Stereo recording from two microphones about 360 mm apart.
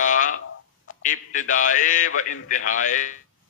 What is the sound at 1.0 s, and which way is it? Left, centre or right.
A man's voice, left.